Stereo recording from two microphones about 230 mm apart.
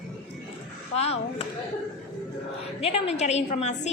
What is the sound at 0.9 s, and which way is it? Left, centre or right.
Speech, left.